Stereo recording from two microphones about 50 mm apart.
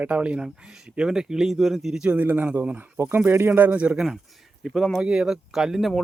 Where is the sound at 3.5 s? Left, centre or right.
Right.